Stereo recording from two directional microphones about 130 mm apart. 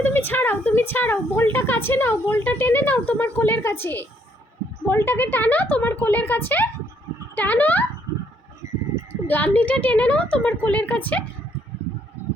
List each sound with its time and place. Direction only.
0.0 s speech: 15° left (ahead or behind)
9.2 s speech: 15° left (ahead or behind)